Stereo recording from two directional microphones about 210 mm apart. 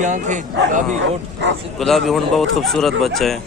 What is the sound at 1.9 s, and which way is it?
A man's voice, centre (ahead or behind).